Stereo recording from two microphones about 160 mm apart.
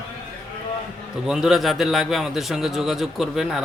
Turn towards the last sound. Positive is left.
turn(degrees=0)  # may be behind; listen again after turning